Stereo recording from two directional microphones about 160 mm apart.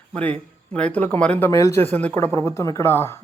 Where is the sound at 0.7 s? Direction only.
5° left (ahead or behind).